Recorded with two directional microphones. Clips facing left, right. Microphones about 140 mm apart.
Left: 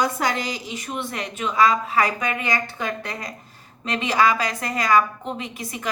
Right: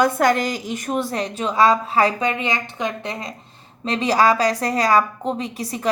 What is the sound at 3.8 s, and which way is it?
A woman's voice, 35° right (ahead or behind).